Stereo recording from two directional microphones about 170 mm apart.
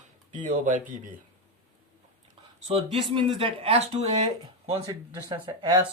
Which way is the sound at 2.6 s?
35° right (ahead or behind).